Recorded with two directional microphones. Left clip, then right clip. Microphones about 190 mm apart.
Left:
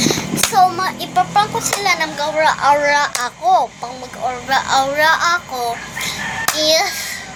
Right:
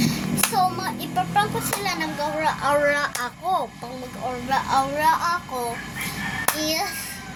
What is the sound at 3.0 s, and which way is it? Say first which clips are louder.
Speech: left 8 dB; 20° right (ahead or behind).